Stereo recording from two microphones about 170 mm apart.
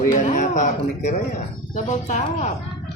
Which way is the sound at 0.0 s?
50° left (ahead or behind).